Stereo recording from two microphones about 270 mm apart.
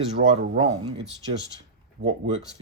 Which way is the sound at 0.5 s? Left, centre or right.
Centre.